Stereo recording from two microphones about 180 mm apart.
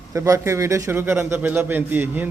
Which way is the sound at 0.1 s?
15° right (ahead or behind).